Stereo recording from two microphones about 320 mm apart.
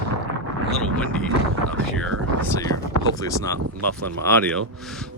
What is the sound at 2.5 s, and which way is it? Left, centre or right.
Speech, centre.